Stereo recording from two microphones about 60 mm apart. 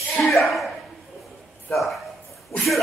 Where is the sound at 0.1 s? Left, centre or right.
Centre.